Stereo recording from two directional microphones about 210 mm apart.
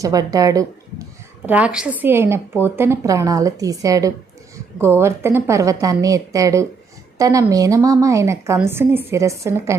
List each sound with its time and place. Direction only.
0.0 s a woman's voice: 15° right (ahead or behind)